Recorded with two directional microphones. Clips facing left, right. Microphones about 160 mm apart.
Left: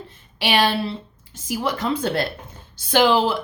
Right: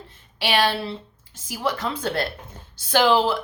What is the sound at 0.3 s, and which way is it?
A woman's voice, 15° left (ahead or behind).